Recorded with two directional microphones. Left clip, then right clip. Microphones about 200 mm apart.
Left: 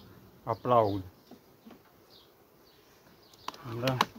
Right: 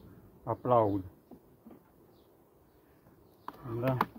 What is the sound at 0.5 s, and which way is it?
Speech, 10° left (ahead or behind).